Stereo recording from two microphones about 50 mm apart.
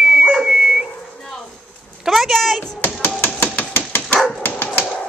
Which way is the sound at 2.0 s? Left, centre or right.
Centre.